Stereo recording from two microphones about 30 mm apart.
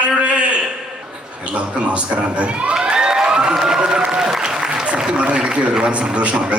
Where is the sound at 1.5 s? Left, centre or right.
Right.